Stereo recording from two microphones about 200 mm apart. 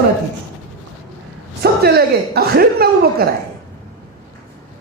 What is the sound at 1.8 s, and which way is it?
A woman's voice, 50° right (ahead or behind).